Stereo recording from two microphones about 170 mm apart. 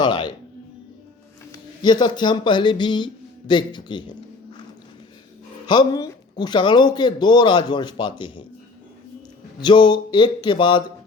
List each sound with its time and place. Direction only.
0.0 s music: 25° left (ahead or behind)
1.5 s speech: 25° left (ahead or behind)
5.6 s speech: 25° left (ahead or behind)
9.6 s speech: 25° left (ahead or behind)